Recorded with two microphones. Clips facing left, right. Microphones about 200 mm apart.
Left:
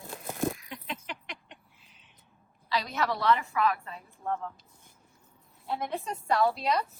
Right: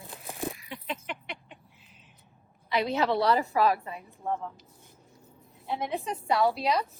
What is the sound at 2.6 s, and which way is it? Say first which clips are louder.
A woman's voice: right 4 dB; 25° right (ahead or behind).